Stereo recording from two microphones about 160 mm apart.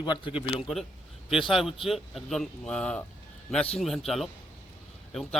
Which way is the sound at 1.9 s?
Centre (ahead or behind).